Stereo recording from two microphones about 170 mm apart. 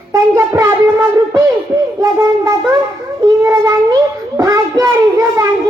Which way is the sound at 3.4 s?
15° right (ahead or behind).